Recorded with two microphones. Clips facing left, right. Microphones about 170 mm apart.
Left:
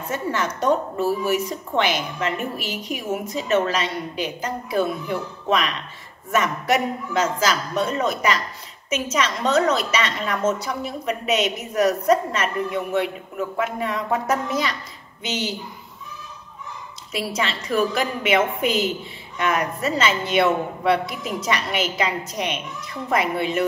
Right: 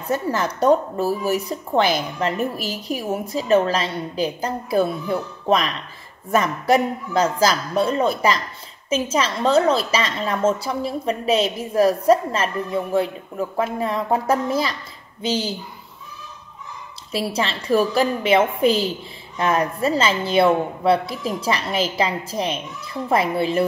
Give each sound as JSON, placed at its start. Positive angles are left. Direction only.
{"t": 0.1, "sound": "a woman's voice", "side_deg": -35}
{"t": 17.1, "sound": "a woman's voice", "side_deg": -30}